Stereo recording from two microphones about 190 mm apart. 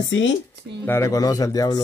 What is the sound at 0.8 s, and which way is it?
Speech, 15° left (ahead or behind).